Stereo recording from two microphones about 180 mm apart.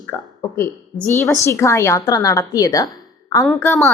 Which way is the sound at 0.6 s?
10° left (ahead or behind).